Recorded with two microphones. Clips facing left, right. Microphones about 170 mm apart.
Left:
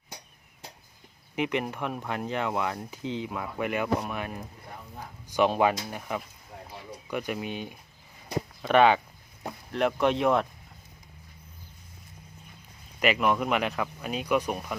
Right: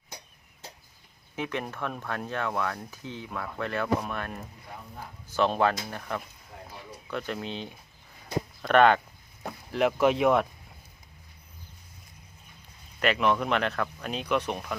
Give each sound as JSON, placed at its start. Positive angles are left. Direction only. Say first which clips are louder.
{"t": 1.4, "sound": "speech", "louder": "left 4 dB", "side_deg": 15}
{"t": 13.0, "sound": "speech", "louder": "even", "side_deg": 10}